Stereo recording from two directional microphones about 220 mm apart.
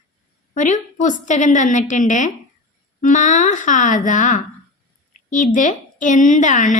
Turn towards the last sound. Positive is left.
turn(degrees=35)  # may be behind; listen again after turning